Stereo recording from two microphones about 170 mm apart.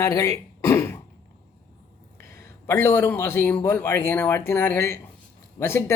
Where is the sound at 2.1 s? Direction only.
15° left (ahead or behind).